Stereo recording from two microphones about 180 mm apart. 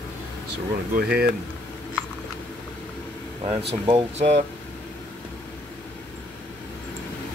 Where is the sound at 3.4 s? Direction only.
30° right (ahead or behind).